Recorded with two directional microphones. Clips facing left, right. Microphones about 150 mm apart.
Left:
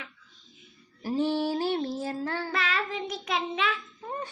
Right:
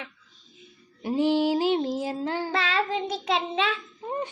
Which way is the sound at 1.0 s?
15° right (ahead or behind).